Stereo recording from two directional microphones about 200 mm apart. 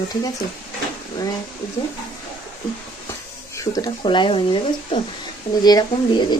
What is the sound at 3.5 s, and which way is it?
Speech, 15° left (ahead or behind).